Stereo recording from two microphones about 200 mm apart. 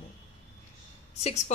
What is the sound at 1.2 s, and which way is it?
Speech, 35° left (ahead or behind).